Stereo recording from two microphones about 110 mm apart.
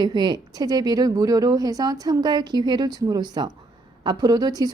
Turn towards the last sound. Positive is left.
turn(degrees=-35)  # may be behind; listen again after turning